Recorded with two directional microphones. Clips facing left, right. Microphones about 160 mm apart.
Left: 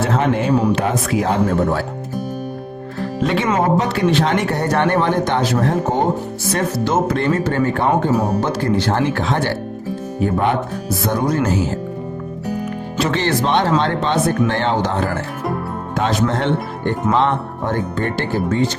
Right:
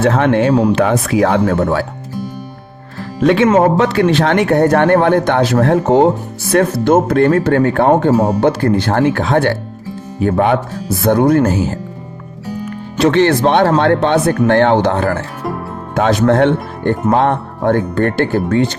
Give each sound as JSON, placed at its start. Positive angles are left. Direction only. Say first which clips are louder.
{"t": 0.2, "sound": "speech", "louder": "right 5 dB", "side_deg": -85}
{"t": 3.8, "sound": "speech", "louder": "right 4 dB", "side_deg": -65}
{"t": 6.5, "sound": "speech", "louder": "right 8 dB", "side_deg": -55}
{"t": 10.2, "sound": "speech", "louder": "right 5 dB", "side_deg": -65}
{"t": 13.1, "sound": "speech", "louder": "right 8 dB", "side_deg": -60}